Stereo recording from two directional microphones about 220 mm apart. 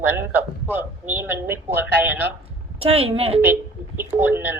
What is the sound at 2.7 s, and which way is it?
Speech, 25° right (ahead or behind).